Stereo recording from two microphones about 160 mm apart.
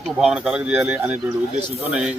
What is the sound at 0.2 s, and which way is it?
A man's voice, 5° right (ahead or behind).